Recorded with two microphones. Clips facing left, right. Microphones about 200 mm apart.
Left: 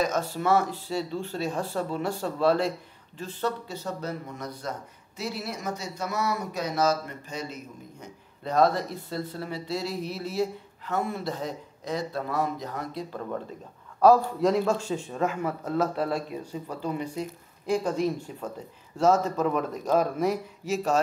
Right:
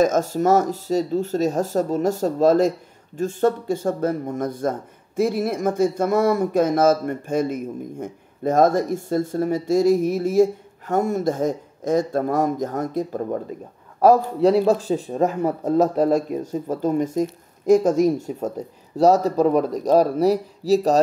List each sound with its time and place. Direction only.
0.0 s speech: 45° right (ahead or behind)
14.4 s speech: 35° right (ahead or behind)